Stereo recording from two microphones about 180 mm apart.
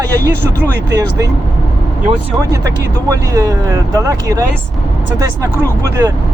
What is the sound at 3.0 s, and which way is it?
Speech, 20° right (ahead or behind).